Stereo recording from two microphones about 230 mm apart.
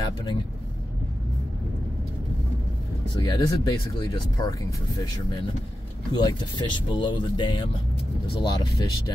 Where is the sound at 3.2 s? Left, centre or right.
Centre.